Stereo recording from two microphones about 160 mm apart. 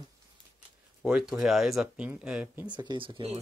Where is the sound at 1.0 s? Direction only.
5° right (ahead or behind).